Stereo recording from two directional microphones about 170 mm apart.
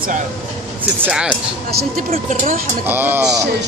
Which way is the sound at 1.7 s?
65° right (ahead or behind).